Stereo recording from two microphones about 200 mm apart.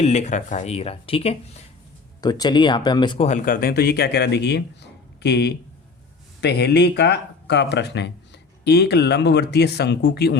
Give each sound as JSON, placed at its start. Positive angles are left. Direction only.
{"t": 0.0, "sound": "speech", "side_deg": 35}
{"t": 3.2, "sound": "speech", "side_deg": 40}